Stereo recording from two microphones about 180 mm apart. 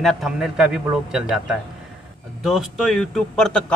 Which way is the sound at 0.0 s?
Centre (ahead or behind).